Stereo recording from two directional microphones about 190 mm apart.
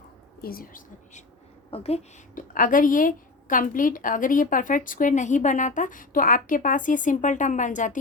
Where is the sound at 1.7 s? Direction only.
30° left (ahead or behind).